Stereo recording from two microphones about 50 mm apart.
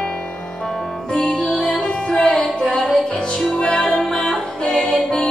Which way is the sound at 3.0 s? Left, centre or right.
Centre.